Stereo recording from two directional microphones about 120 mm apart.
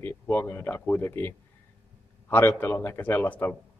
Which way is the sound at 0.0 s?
20° left (ahead or behind).